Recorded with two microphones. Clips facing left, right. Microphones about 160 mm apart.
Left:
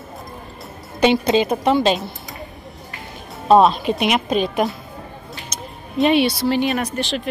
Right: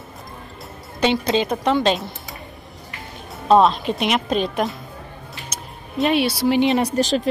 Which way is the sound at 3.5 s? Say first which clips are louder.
Left 2 dB; 5° left (ahead or behind).